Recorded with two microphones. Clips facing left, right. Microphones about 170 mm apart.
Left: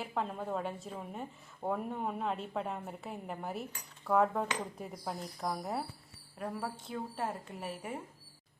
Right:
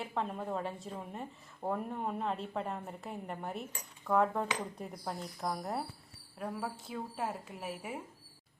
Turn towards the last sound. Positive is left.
turn(degrees=-5)  # may be behind; listen again after turning